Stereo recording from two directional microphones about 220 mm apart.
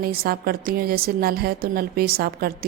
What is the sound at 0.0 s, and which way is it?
A woman's voice, 45° right (ahead or behind).